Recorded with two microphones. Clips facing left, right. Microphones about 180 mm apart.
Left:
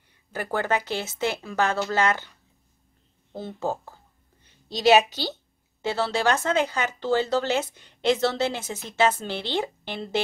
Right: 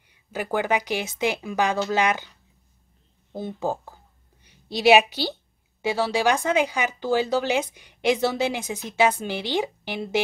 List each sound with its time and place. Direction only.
0.3 s speech: 15° right (ahead or behind)
3.3 s a woman's voice: 15° right (ahead or behind)